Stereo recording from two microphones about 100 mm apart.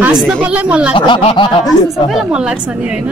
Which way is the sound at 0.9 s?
75° left (ahead or behind).